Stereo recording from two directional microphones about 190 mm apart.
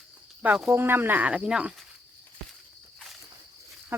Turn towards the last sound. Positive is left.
turn(degrees=-10)  # may be behind; listen again after turning